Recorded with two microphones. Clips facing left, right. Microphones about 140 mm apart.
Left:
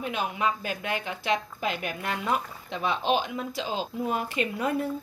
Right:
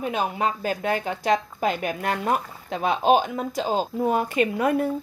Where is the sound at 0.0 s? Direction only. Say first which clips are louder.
Right 4 dB; 40° right (ahead or behind).